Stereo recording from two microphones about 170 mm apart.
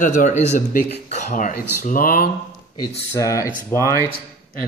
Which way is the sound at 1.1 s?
45° left (ahead or behind).